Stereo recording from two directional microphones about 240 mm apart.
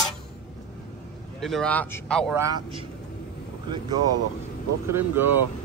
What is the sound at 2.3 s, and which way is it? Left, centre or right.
Speech, centre.